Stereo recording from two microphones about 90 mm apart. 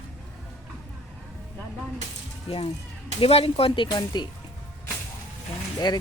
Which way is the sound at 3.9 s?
50° left (ahead or behind).